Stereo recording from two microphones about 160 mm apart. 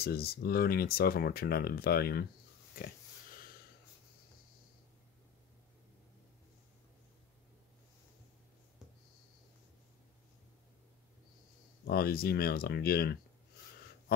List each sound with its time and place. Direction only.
0.0 s speech: 75° left (ahead or behind)
11.9 s speech: 70° left (ahead or behind)